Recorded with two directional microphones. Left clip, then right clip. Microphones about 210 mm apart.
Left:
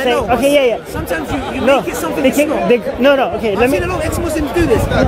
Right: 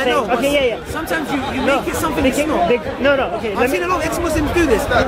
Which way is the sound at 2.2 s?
40° left (ahead or behind).